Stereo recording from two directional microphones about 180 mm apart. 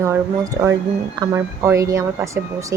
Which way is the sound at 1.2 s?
15° right (ahead or behind).